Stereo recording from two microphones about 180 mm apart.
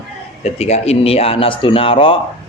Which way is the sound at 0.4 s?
35° left (ahead or behind).